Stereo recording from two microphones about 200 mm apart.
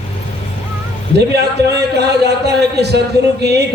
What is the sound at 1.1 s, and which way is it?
A man's voice, 55° right (ahead or behind).